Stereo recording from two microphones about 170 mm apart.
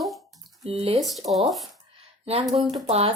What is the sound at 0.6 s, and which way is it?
Speech, 35° right (ahead or behind).